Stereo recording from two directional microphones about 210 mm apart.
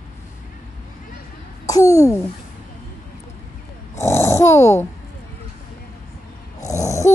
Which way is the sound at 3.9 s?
15° left (ahead or behind).